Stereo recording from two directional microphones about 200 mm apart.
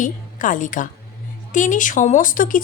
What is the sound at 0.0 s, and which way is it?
A woman's voice, 40° left (ahead or behind).